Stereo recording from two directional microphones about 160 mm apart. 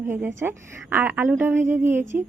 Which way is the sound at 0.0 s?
15° right (ahead or behind).